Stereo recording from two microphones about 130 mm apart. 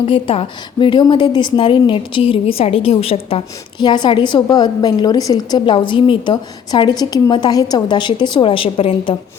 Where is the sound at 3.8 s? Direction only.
35° left (ahead or behind).